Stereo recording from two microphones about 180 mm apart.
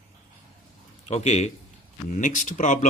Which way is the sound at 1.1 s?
35° left (ahead or behind).